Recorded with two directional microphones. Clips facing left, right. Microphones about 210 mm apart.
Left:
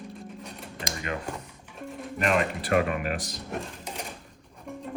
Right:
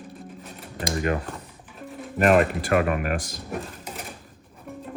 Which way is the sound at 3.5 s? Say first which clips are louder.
Right 2 dB; 5° right (ahead or behind).